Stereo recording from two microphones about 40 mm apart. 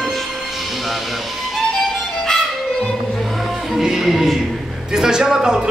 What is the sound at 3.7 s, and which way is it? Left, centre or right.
Music, centre.